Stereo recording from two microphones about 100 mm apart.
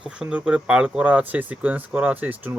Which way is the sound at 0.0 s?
10° right (ahead or behind).